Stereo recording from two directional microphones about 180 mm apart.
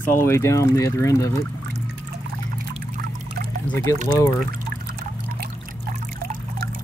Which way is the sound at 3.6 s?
15° left (ahead or behind).